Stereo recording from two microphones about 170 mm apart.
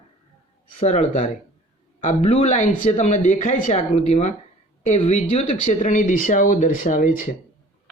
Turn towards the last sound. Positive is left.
turn(degrees=50)  # may be behind; listen again after turning